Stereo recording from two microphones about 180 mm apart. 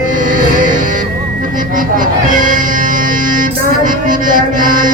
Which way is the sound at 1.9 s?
50° right (ahead or behind).